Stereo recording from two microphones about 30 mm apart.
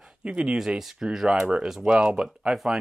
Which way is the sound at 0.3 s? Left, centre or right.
Right.